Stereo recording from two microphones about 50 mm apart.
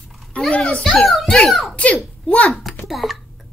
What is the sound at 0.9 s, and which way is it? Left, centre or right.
Speech, centre.